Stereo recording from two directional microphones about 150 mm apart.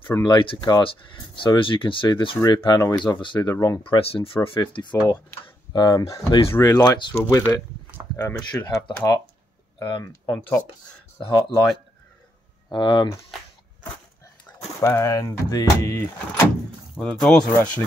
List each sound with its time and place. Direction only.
0.0 s speech: 20° left (ahead or behind)
0.3 s speech: 35° left (ahead or behind)
3.8 s speech: 40° left (ahead or behind)
4.6 s speech: 30° left (ahead or behind)
8.6 s speech: 25° left (ahead or behind)
12.6 s speech: 30° left (ahead or behind)
14.8 s speech: 20° left (ahead or behind)
17.0 s speech: 5° left (ahead or behind)